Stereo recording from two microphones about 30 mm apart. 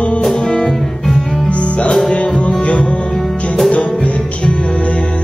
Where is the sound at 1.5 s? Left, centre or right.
Left.